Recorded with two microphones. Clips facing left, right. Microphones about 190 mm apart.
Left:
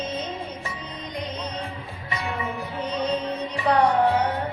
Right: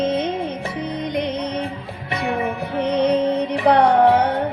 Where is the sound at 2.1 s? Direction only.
65° right (ahead or behind).